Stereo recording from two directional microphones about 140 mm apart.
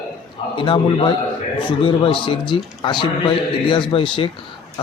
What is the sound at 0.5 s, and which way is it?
Speech, 35° left (ahead or behind).